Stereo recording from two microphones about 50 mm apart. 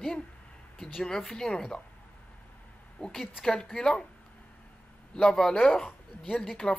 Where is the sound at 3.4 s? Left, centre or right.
Centre.